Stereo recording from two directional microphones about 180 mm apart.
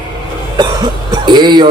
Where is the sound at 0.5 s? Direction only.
25° right (ahead or behind).